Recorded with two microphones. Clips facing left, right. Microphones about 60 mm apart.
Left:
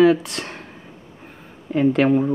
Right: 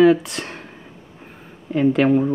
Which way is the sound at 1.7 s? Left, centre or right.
Centre.